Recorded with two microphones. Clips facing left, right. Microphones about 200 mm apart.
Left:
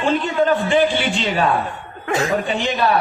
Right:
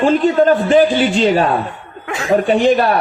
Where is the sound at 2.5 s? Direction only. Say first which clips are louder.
Right 8 dB; 50° right (ahead or behind).